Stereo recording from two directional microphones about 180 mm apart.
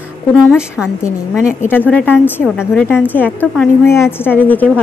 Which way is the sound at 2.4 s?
5° right (ahead or behind).